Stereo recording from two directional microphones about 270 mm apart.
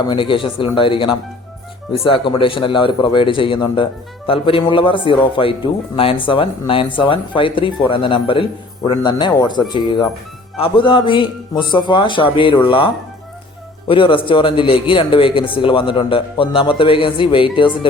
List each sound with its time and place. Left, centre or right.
0.1 s a man's voice: centre